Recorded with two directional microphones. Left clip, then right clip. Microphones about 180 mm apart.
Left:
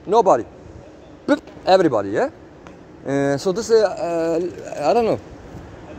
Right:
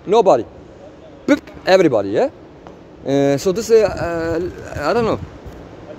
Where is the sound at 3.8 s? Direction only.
40° right (ahead or behind).